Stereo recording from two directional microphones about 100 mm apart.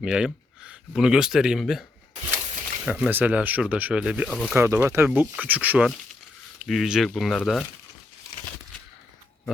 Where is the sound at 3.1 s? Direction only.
15° right (ahead or behind).